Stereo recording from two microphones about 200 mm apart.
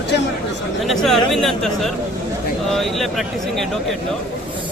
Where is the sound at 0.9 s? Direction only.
Centre (ahead or behind).